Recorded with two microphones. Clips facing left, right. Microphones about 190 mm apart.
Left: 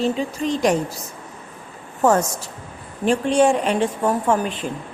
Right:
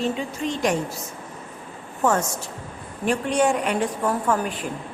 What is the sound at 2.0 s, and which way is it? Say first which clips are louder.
A woman's voice: left 4 dB; 40° left (ahead or behind).